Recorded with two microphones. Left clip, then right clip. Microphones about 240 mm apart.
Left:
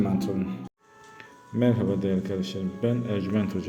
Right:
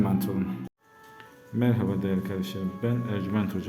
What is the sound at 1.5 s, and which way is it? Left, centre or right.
A man's voice, centre.